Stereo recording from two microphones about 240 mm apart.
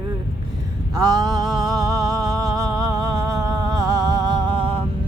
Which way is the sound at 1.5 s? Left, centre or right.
Centre.